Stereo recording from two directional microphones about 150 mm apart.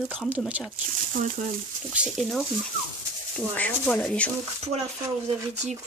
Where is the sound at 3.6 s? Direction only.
10° left (ahead or behind).